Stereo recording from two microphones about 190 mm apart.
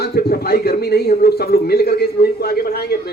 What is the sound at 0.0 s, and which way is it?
A man's voice, 55° left (ahead or behind).